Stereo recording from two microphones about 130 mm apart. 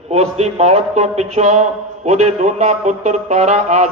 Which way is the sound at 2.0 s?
60° right (ahead or behind).